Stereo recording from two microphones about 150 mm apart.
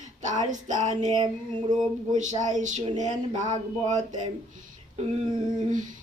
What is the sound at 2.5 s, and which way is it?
A woman's voice, 55° right (ahead or behind).